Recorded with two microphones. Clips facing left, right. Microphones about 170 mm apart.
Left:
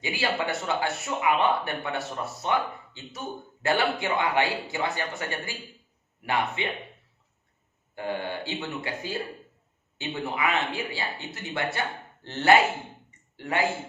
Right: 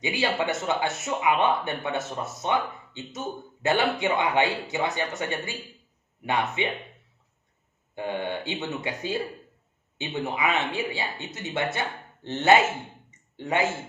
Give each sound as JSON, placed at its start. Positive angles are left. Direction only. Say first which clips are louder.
{"t": 0.0, "sound": "speech", "louder": "right 2 dB", "side_deg": -20}
{"t": 7.9, "sound": "speech", "louder": "right 1 dB", "side_deg": -20}
{"t": 13.1, "sound": "a sound", "louder": "right 3 dB", "side_deg": -20}